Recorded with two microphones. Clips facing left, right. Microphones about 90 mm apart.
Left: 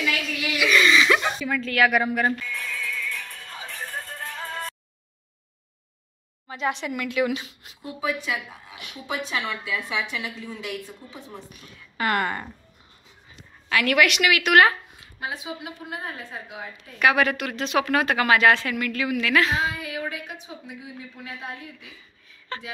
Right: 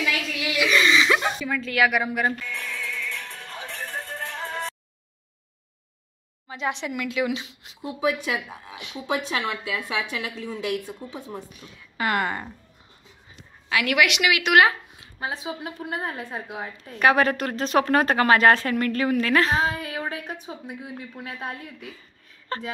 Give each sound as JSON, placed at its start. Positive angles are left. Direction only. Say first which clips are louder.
{"t": 0.6, "sound": "a sound", "louder": "left 1 dB", "side_deg": -25}
{"t": 2.5, "sound": "music", "louder": "left 1 dB", "side_deg": -20}
{"t": 4.5, "sound": "a sound", "louder": "right 2 dB", "side_deg": -20}
{"t": 6.5, "sound": "speech", "louder": "left 1 dB", "side_deg": -20}
{"t": 9.3, "sound": "a woman's voice", "louder": "right 1 dB", "side_deg": -10}
{"t": 11.6, "sound": "speech", "louder": "left 1 dB", "side_deg": -20}
{"t": 13.7, "sound": "a woman's voice", "louder": "left 1 dB", "side_deg": -10}
{"t": 15.1, "sound": "a woman's voice", "louder": "right 2 dB", "side_deg": -35}
{"t": 15.8, "sound": "a woman's voice", "louder": "right 4 dB", "side_deg": -55}
{"t": 16.5, "sound": "a woman's voice", "louder": "right 3 dB", "side_deg": -40}